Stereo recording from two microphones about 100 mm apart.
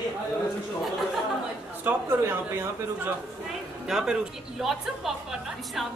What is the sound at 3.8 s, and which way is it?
Speech, 5° right (ahead or behind).